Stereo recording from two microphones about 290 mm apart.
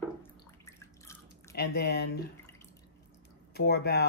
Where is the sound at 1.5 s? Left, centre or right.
Left.